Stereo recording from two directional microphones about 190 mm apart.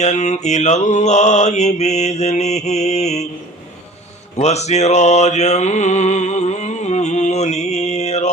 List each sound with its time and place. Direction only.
0.0 s mantra: 40° left (ahead or behind)
4.4 s mantra: 35° left (ahead or behind)